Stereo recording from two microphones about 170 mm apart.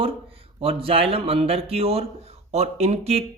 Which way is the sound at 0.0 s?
35° right (ahead or behind).